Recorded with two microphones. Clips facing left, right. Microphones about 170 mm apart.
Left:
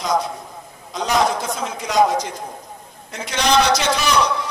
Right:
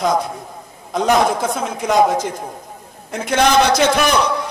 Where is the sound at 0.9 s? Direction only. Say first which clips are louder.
Right 4 dB; 55° right (ahead or behind).